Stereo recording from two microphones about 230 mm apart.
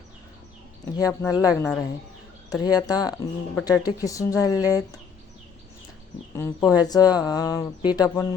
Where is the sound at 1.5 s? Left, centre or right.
Centre.